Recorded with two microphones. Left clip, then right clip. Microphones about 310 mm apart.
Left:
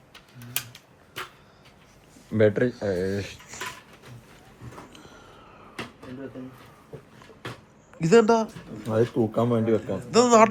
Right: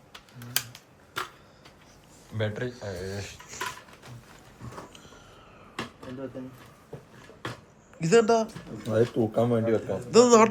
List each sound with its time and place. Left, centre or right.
2.3 s speech: left
3.4 s dishes: centre
4.9 s a sound: centre
6.4 s speech: centre
7.9 s speech: centre
8.9 s speech: centre
9.8 s a man's voice: centre